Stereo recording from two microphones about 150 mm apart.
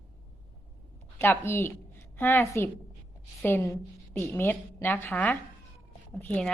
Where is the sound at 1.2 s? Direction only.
15° left (ahead or behind).